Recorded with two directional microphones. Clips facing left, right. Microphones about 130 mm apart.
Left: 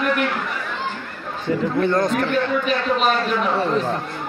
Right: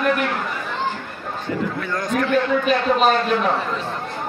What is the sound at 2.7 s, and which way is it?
Speech, 40° right (ahead or behind).